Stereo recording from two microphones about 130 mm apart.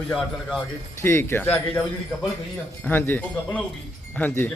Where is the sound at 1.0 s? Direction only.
20° left (ahead or behind).